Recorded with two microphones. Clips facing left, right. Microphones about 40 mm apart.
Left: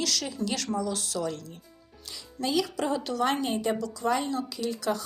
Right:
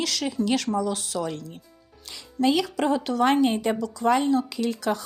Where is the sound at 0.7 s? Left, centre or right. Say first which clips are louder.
Right 4 dB; right.